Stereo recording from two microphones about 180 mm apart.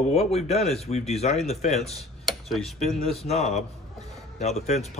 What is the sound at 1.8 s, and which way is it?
Speech, centre (ahead or behind).